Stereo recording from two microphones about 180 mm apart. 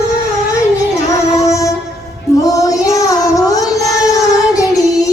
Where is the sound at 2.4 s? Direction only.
20° left (ahead or behind).